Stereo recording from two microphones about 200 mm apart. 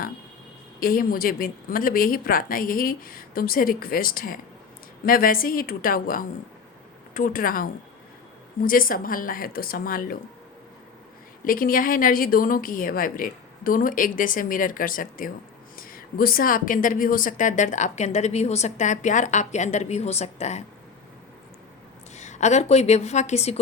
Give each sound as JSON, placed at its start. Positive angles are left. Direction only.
{"t": 0.8, "sound": "a woman's voice", "side_deg": 45}
{"t": 11.4, "sound": "a woman's voice", "side_deg": 45}
{"t": 22.1, "sound": "speech", "side_deg": 35}